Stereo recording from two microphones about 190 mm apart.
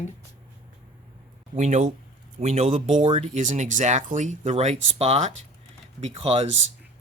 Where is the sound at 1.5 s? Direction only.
40° right (ahead or behind).